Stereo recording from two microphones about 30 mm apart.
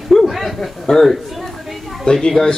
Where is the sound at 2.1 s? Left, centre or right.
Centre.